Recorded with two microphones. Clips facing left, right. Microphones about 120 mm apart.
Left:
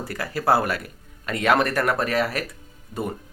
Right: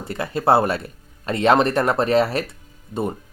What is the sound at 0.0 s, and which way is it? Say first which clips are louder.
Speech: right 3 dB; 25° right (ahead or behind).